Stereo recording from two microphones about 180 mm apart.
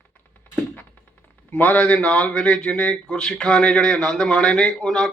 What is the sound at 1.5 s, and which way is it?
Speech, 10° left (ahead or behind).